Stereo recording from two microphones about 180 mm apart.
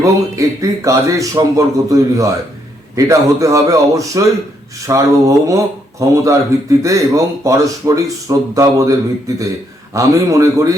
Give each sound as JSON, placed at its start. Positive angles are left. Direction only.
{"t": 0.0, "sound": "speech", "side_deg": -20}